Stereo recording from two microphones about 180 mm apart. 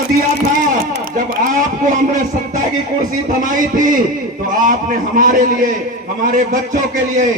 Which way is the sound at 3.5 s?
50° right (ahead or behind).